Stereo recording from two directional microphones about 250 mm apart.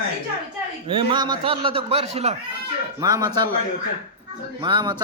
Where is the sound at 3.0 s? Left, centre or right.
Centre.